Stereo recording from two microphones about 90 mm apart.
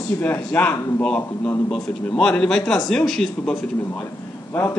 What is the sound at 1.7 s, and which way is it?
Speech, 10° left (ahead or behind).